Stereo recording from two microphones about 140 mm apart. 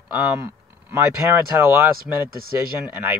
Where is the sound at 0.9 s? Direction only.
20° right (ahead or behind).